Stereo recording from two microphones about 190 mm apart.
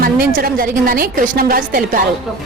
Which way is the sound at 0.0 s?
50° right (ahead or behind).